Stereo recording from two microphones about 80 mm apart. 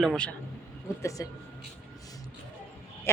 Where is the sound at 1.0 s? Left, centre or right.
Left.